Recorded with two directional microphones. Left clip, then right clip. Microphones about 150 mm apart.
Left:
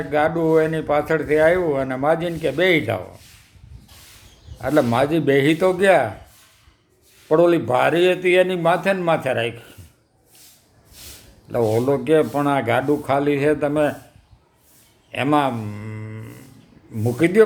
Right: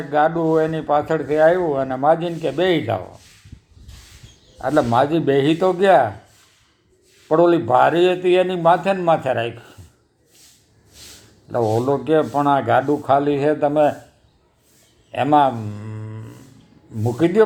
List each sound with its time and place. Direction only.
0.1 s speech: 15° left (ahead or behind)
4.5 s speech: 20° left (ahead or behind)
7.3 s speech: 15° left (ahead or behind)
11.4 s speech: 15° left (ahead or behind)
15.1 s speech: 15° left (ahead or behind)